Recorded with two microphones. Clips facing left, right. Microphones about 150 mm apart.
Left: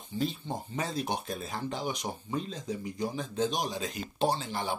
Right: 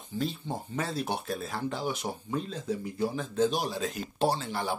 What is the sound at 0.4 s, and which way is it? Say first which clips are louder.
Speech: right 1 dB; 10° right (ahead or behind).